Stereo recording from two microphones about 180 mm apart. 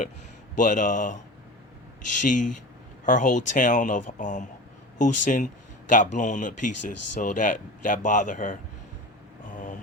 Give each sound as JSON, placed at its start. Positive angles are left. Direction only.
{"t": 0.5, "sound": "speech", "side_deg": 45}
{"t": 2.2, "sound": "speech", "side_deg": 45}